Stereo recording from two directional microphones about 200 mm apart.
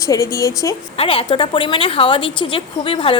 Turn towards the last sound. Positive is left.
turn(degrees=25)  # may be behind; listen again after turning